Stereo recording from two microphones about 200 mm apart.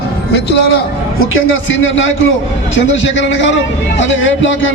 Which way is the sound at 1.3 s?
75° left (ahead or behind).